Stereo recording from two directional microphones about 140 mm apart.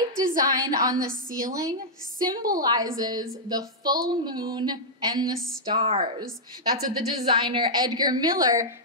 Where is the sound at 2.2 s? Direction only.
25° right (ahead or behind).